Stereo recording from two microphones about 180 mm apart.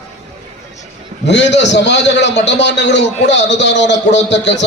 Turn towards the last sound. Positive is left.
turn(degrees=80)